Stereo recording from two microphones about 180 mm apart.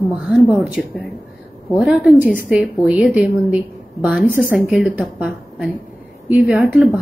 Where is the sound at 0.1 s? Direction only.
5° right (ahead or behind).